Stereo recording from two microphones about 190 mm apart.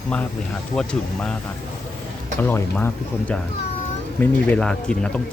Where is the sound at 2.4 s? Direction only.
10° left (ahead or behind).